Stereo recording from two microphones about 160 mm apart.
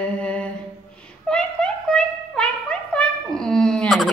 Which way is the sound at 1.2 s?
5° left (ahead or behind).